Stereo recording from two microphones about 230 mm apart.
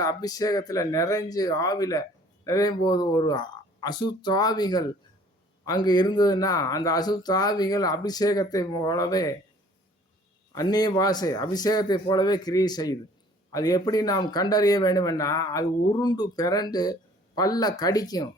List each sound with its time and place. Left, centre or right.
0.0 s speech: centre
10.5 s speech: centre